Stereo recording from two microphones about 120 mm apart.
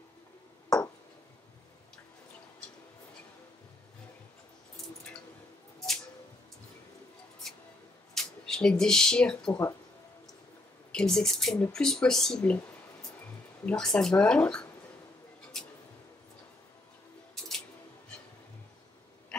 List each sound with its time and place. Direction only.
8.1 s speech: 5° left (ahead or behind)
9.5 s speech: 25° left (ahead or behind)
10.9 s speech: 5° left (ahead or behind)
13.7 s speech: 5° left (ahead or behind)
15.5 s music: 5° left (ahead or behind)